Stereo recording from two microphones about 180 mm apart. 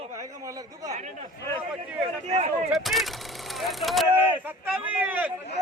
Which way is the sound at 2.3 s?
40° right (ahead or behind).